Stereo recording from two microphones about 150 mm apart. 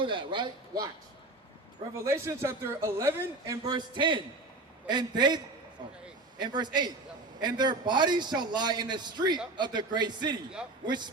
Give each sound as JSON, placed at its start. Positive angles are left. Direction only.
{"t": 0.0, "sound": "speech", "side_deg": -35}
{"t": 2.0, "sound": "a man's voice", "side_deg": -15}
{"t": 6.4, "sound": "a man's voice", "side_deg": -30}